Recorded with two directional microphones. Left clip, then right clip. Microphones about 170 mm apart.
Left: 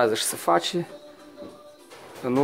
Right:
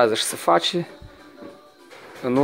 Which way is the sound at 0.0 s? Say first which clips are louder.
Right 4 dB; 5° right (ahead or behind).